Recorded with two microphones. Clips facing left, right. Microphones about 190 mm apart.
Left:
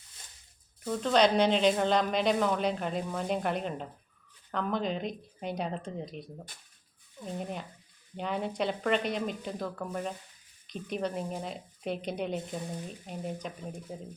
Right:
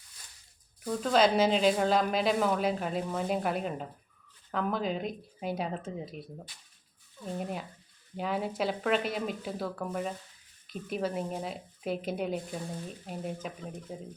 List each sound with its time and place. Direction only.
0.9 s a woman's voice: 5° right (ahead or behind)
7.3 s a woman's voice: 5° right (ahead or behind)